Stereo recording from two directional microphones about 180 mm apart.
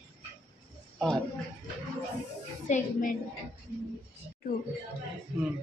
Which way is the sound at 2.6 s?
45° left (ahead or behind).